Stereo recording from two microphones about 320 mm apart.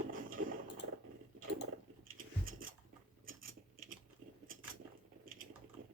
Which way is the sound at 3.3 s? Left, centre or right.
Right.